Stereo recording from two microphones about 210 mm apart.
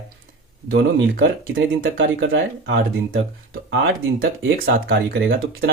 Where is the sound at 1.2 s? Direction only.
60° right (ahead or behind).